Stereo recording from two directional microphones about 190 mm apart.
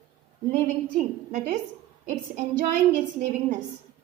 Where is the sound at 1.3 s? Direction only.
40° right (ahead or behind).